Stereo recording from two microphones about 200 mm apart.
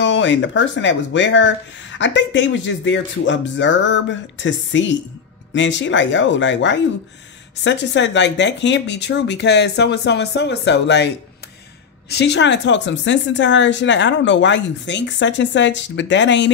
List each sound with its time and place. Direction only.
0.0 s speech: 65° left (ahead or behind)
12.1 s speech: 55° left (ahead or behind)